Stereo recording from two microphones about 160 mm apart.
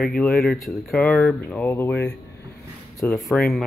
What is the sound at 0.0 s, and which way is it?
Speech, centre (ahead or behind).